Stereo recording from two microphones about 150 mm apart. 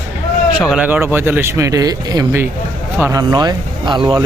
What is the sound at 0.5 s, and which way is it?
Speech, 5° right (ahead or behind).